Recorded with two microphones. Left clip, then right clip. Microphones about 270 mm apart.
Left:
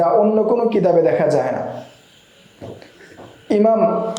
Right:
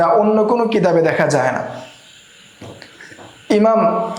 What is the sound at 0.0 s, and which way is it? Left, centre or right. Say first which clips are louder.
A woman's voice: right 1 dB; right.